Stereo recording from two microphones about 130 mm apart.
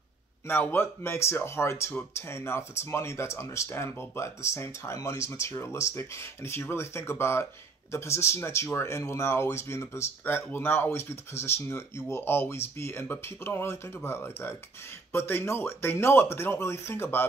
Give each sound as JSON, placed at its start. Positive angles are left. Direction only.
{"t": 0.5, "sound": "speech", "side_deg": 15}